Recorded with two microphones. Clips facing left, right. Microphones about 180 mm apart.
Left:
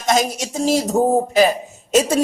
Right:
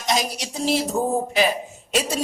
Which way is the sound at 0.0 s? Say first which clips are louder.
Left 6 dB; 45° left (ahead or behind).